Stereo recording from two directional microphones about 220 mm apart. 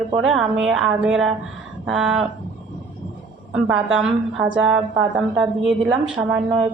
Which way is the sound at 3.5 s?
5° right (ahead or behind).